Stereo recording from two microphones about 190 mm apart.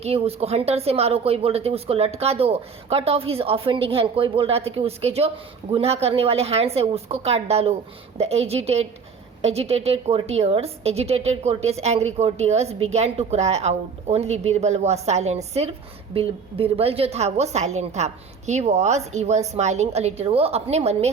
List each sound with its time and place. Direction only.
0.0 s a woman's voice: 30° right (ahead or behind)